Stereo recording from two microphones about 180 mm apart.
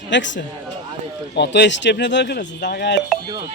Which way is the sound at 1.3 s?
70° left (ahead or behind).